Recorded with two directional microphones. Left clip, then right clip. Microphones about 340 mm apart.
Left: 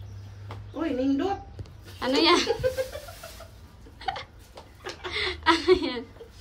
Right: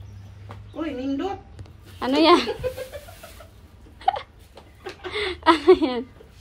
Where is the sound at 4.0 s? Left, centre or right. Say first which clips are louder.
Right 9 dB; centre.